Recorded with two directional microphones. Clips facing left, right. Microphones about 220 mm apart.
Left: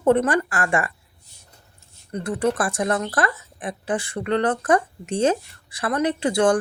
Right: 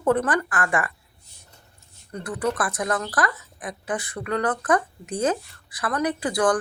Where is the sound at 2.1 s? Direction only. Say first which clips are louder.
Left 4 dB; 25° left (ahead or behind).